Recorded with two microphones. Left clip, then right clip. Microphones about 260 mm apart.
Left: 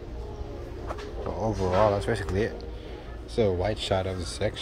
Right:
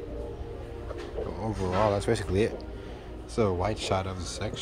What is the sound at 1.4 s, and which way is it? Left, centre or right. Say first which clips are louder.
Speech: left 4 dB; right.